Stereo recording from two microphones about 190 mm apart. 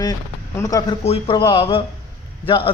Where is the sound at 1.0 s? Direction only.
30° left (ahead or behind).